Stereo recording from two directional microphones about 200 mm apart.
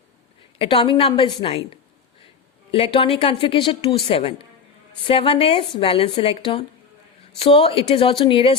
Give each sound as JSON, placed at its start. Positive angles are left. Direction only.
{"t": 0.6, "sound": "speech", "side_deg": 25}